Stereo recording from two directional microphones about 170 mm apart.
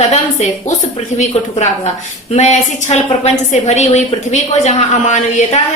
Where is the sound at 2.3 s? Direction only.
40° left (ahead or behind).